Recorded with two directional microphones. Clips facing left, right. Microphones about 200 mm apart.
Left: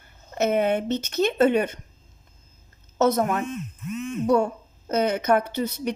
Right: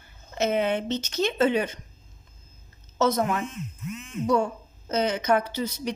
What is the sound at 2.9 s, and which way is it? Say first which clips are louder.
Speech: left 3 dB; 60° left (ahead or behind).